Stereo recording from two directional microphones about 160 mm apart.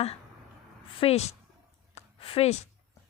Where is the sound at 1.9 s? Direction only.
35° left (ahead or behind).